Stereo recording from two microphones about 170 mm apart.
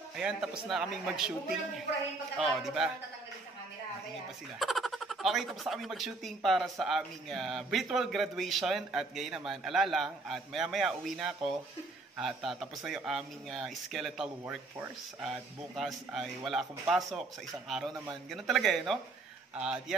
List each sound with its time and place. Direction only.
0.1 s speech: 5° right (ahead or behind)
4.6 s speech: centre (ahead or behind)
17.6 s speech: centre (ahead or behind)